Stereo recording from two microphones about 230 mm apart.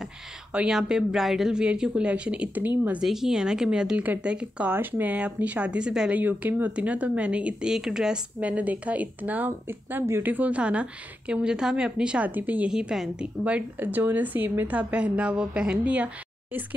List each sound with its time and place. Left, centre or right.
0.0 s a woman's voice: centre